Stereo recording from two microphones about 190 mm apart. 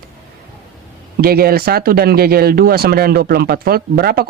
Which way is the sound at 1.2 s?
50° right (ahead or behind).